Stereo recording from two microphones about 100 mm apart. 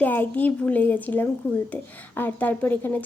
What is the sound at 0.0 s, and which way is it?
Speech, 15° left (ahead or behind).